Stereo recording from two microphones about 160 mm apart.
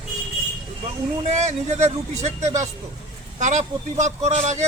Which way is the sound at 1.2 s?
45° right (ahead or behind).